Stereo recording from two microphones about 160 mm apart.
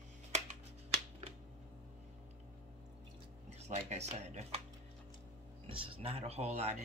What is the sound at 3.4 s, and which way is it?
Speech, 45° right (ahead or behind).